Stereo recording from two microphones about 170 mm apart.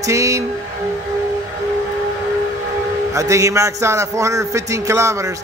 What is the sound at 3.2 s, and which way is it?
A man's voice, 20° right (ahead or behind).